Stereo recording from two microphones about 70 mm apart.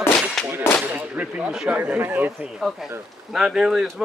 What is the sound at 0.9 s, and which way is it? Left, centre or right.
A man's voice, right.